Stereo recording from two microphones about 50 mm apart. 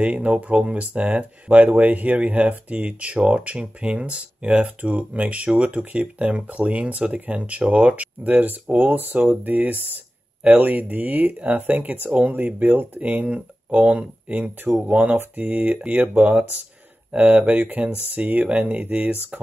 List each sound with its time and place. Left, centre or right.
0.0 s speech: right
13.1 s speech: right